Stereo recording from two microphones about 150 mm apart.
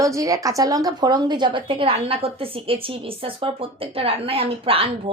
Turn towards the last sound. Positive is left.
turn(degrees=-40)  # may be behind; listen again after turning